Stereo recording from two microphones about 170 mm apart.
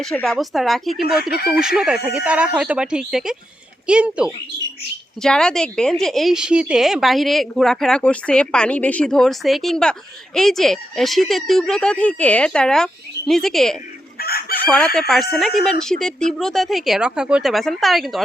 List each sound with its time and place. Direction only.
0.0 s speech: 5° left (ahead or behind)
5.2 s speech: 5° left (ahead or behind)
14.2 s chicken: 60° left (ahead or behind)
14.6 s chicken: 10° left (ahead or behind)
14.9 s speech: centre (ahead or behind)